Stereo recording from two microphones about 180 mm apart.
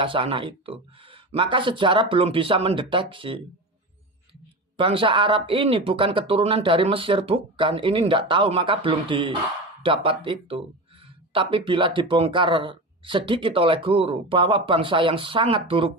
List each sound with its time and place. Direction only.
0.0 s speech: 30° right (ahead or behind)
4.8 s speech: 30° right (ahead or behind)